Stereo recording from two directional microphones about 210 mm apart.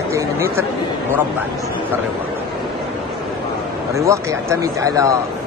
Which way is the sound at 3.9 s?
15° right (ahead or behind).